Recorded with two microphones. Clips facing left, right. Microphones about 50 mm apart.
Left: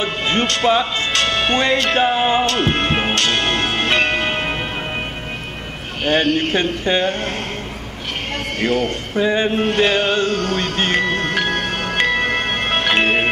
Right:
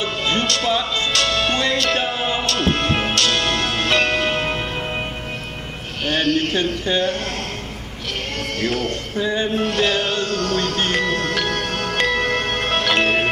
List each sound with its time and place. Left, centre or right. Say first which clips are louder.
0.0 s music: left 2 dB; left
6.0 s a man's voice: left 3 dB; left
8.5 s music: left 4 dB; left